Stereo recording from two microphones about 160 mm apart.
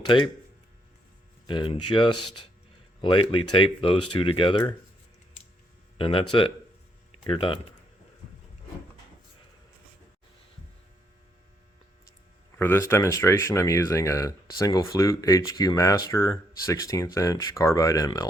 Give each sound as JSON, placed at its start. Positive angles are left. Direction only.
{"t": 1.5, "sound": "speech", "side_deg": 35}
{"t": 6.0, "sound": "speech", "side_deg": 35}
{"t": 7.3, "sound": "speech", "side_deg": 30}
{"t": 12.5, "sound": "speech", "side_deg": 15}